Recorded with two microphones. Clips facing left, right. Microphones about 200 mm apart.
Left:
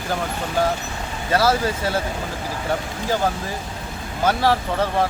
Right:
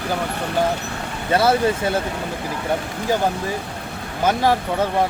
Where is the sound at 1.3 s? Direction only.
25° right (ahead or behind).